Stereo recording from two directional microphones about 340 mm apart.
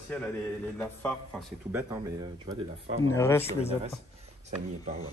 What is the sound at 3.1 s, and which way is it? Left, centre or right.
Speech, centre.